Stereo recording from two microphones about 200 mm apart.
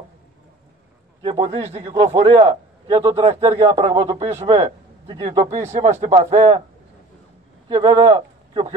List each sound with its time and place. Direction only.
1.2 s a man's voice: 30° right (ahead or behind)
3.6 s a man's voice: 30° right (ahead or behind)
7.6 s speech: 20° right (ahead or behind)